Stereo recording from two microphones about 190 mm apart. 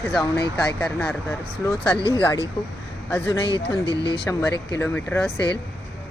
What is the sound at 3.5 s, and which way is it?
Speech, 20° right (ahead or behind).